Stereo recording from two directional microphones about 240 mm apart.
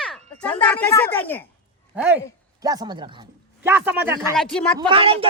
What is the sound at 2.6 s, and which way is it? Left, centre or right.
Speech, centre.